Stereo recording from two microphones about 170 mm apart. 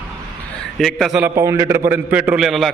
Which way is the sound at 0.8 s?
Centre (ahead or behind).